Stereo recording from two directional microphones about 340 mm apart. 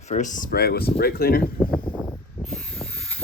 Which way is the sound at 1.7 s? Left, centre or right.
Centre.